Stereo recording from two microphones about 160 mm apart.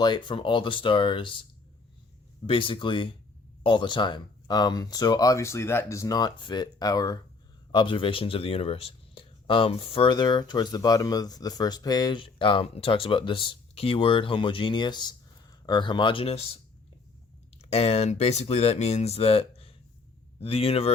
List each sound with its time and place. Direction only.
0.0 s speech: 30° left (ahead or behind)
2.5 s speech: 30° left (ahead or behind)
17.6 s speech: 40° left (ahead or behind)